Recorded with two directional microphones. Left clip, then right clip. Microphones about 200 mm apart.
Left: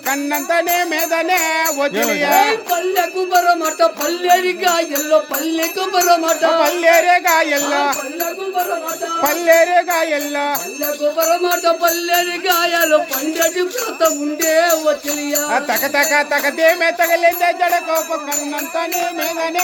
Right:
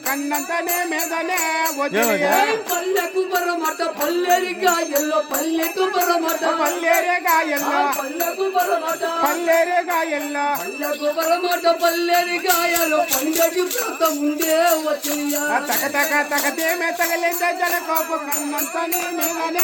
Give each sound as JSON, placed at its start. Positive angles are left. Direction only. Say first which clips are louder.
{"t": 0.1, "sound": "music", "louder": "left 5 dB", "side_deg": 60}
{"t": 2.2, "sound": "music", "louder": "left 4 dB", "side_deg": 50}
{"t": 9.2, "sound": "music", "louder": "left 6 dB", "side_deg": 60}
{"t": 11.3, "sound": "music", "louder": "left 1 dB", "side_deg": 25}
{"t": 15.5, "sound": "music", "louder": "left 6 dB", "side_deg": 60}